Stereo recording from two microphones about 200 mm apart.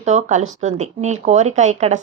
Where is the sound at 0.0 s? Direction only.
35° right (ahead or behind).